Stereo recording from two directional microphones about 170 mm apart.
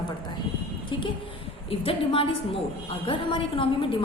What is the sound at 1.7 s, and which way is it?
A woman's voice, 35° left (ahead or behind).